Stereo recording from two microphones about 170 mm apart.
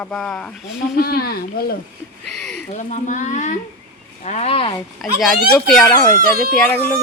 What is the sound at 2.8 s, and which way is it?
Speech, 45° left (ahead or behind).